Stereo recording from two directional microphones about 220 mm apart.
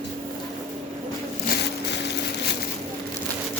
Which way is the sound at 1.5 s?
50° left (ahead or behind).